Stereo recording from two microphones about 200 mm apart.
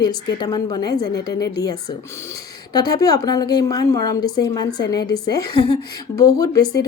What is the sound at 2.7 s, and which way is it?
A woman's voice, 20° left (ahead or behind).